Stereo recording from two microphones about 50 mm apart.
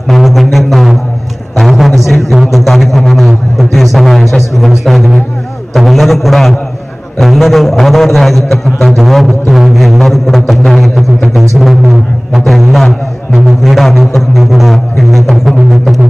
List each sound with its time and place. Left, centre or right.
0.1 s music: centre
1.6 s a man's voice: centre